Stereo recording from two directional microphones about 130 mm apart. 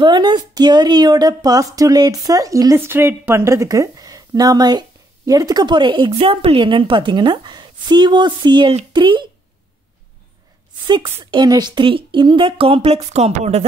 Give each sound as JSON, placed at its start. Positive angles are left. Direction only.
{"t": 0.0, "sound": "a woman's voice", "side_deg": -35}
{"t": 11.2, "sound": "a woman's voice", "side_deg": -35}